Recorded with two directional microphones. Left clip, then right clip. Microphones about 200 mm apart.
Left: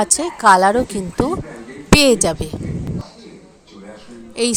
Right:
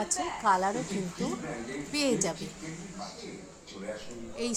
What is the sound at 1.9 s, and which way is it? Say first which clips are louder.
Speech: left 17 dB; 45° left (ahead or behind).